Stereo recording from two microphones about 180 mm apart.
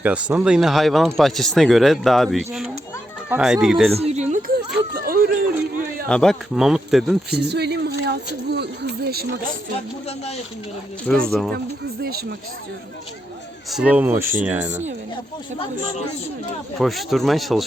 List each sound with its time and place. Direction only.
0.0 s speech: 5° right (ahead or behind)
3.9 s a sound: 35° right (ahead or behind)
4.9 s a sound: 55° right (ahead or behind)
6.1 s speech: 5° left (ahead or behind)
7.3 s speech: 65° right (ahead or behind)
10.1 s speech: 35° left (ahead or behind)
11.1 s speech: 5° left (ahead or behind)
13.7 s speech: 5° right (ahead or behind)
15.5 s speech: 30° left (ahead or behind)
16.7 s speech: centre (ahead or behind)